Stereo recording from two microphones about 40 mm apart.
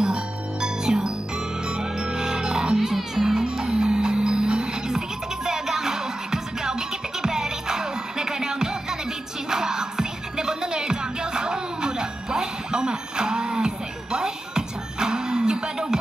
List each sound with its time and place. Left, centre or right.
0.0 s music: centre
2.9 s music: centre
3.4 s music: right